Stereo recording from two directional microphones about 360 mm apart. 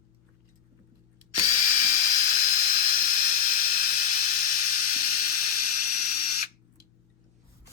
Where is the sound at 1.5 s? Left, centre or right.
Left.